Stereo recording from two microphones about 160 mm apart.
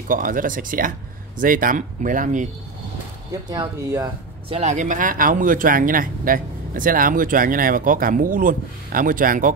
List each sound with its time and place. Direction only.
0.1 s speech: 60° right (ahead or behind)
3.4 s speech: 25° right (ahead or behind)
4.5 s speech: 45° right (ahead or behind)